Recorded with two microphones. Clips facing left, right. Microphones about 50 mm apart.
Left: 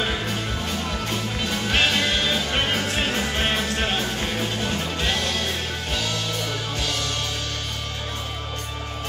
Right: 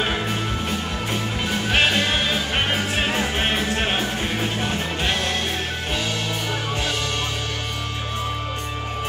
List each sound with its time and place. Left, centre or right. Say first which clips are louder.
1.4 s music: right 2 dB; centre